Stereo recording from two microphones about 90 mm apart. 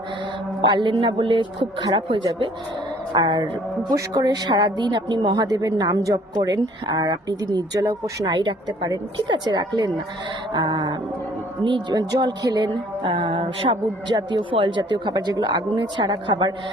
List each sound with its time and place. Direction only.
0.6 s speech: 60° right (ahead or behind)
3.2 s speech: 60° right (ahead or behind)
3.8 s a woman's voice: 45° right (ahead or behind)
8.3 s speech: 60° right (ahead or behind)
11.9 s speech: 45° right (ahead or behind)
14.5 s speech: 65° right (ahead or behind)